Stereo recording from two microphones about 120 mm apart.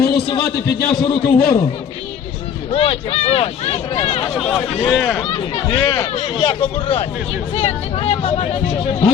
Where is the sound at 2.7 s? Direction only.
55° left (ahead or behind).